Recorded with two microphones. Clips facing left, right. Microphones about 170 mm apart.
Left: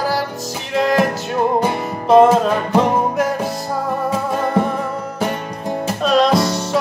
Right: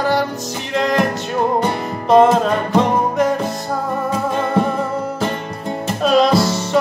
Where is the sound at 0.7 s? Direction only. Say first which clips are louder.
Left 1 dB; centre (ahead or behind).